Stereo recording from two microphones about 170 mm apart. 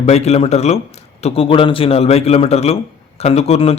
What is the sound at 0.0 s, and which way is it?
Speech, 40° left (ahead or behind).